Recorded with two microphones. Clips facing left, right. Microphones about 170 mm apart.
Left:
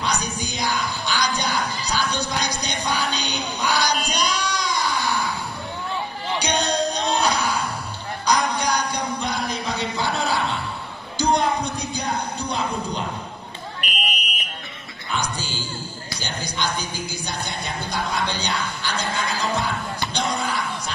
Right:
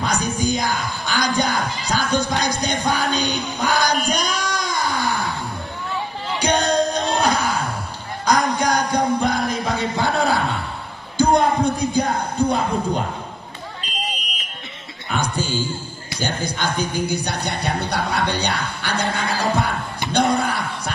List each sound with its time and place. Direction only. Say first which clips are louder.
0.0 s music: right 5 dB; 50° right (ahead or behind)
4.2 s baby cry: right 1 dB; 50° right (ahead or behind)
6.4 s music: right 5 dB; 50° right (ahead or behind)
8.3 s jingle bell: right 3 dB; 50° right (ahead or behind)
11.1 s a sound: right 4 dB; 50° right (ahead or behind)
15.1 s music: right 6 dB; 50° right (ahead or behind)